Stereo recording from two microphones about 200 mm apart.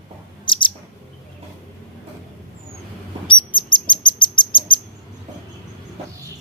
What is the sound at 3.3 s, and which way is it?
Bird, 25° left (ahead or behind).